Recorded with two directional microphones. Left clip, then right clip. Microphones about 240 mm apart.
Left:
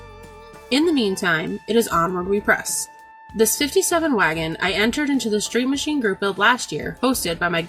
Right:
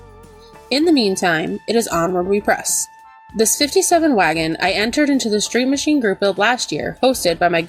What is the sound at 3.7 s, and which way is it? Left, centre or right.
Speech, centre.